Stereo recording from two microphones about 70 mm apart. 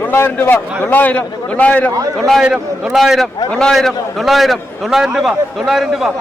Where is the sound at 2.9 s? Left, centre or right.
Centre.